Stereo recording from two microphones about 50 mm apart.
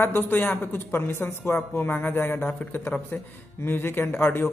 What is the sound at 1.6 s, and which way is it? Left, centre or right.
A man's voice, left.